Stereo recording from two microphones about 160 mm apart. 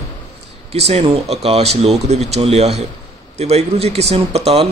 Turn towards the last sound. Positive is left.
turn(degrees=-40)  # may be behind; listen again after turning